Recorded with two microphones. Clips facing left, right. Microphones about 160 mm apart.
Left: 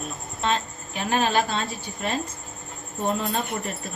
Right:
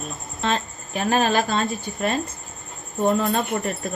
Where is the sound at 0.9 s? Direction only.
45° right (ahead or behind).